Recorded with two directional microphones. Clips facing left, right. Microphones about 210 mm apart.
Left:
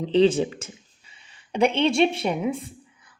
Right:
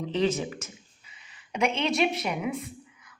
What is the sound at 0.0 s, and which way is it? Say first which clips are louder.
A woman's voice: left 8 dB; 30° left (ahead or behind).